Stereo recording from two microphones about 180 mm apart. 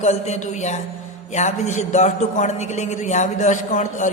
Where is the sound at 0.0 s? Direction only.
40° left (ahead or behind).